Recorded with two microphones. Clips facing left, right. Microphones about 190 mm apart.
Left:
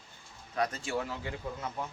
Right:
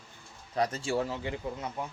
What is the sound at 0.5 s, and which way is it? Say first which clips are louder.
Speech: right 3 dB; 30° right (ahead or behind).